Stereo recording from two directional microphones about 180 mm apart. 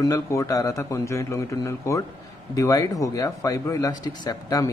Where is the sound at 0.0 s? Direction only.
15° left (ahead or behind).